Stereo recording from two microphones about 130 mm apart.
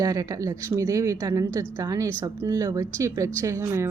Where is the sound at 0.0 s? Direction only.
25° right (ahead or behind).